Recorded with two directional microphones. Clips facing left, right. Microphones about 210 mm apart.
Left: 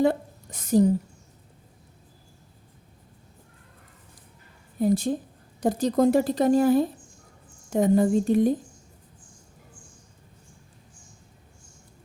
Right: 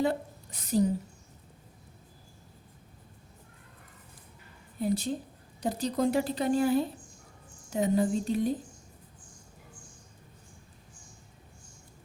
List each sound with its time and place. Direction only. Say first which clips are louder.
0.0 s a woman's voice: left 6 dB; 50° left (ahead or behind)
4.8 s a woman's voice: left 7 dB; 45° left (ahead or behind)